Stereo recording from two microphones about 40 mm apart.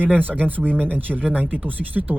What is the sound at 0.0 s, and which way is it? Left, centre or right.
Speech, right.